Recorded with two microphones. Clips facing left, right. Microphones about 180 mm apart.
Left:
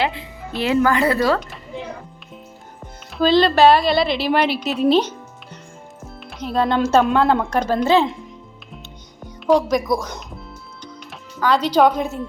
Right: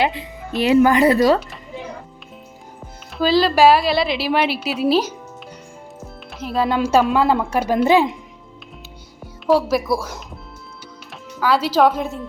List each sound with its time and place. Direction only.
0.0 s speech: 15° right (ahead or behind)
1.4 s a sound: centre (ahead or behind)
2.8 s speech: 5° right (ahead or behind)
9.2 s speech: 5° right (ahead or behind)